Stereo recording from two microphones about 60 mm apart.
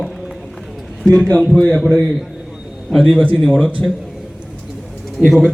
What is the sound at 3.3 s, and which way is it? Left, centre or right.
Speech, centre.